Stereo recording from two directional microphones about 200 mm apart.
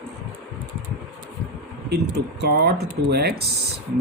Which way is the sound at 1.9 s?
55° right (ahead or behind).